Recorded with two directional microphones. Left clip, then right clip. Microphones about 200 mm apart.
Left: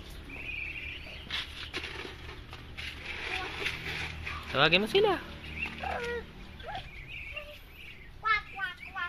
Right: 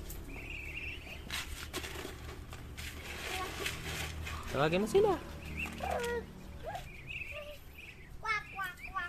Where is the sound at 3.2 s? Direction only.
40° right (ahead or behind).